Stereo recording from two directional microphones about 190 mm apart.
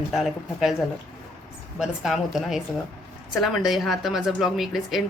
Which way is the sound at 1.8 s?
Centre (ahead or behind).